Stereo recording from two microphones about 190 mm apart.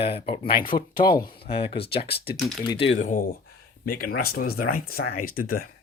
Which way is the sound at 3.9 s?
50° left (ahead or behind).